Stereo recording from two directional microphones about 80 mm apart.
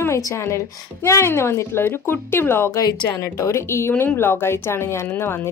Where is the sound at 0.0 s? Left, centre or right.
Left.